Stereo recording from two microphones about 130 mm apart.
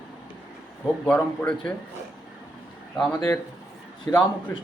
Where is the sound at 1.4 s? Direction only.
10° left (ahead or behind).